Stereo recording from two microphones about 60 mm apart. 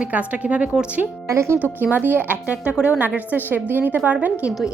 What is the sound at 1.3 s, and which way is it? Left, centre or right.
Speech, right.